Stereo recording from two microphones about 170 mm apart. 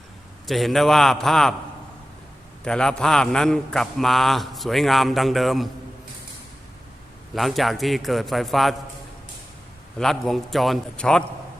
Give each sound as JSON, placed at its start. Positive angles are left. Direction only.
{"t": 0.4, "sound": "a man's voice", "side_deg": 0}
{"t": 2.6, "sound": "a man's voice", "side_deg": 5}
{"t": 7.3, "sound": "a man's voice", "side_deg": 0}
{"t": 10.0, "sound": "a man's voice", "side_deg": 0}